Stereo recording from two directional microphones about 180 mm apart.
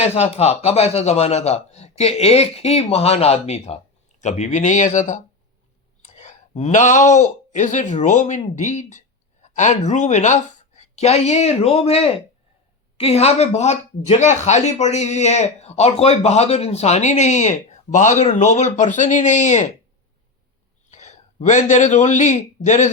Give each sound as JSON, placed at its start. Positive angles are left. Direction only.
{"t": 0.0, "sound": "speech", "side_deg": 35}
{"t": 20.9, "sound": "a man's voice", "side_deg": 40}